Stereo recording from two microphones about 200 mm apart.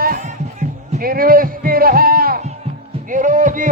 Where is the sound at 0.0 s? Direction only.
45° right (ahead or behind).